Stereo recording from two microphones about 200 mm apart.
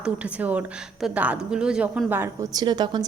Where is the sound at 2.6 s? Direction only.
25° right (ahead or behind).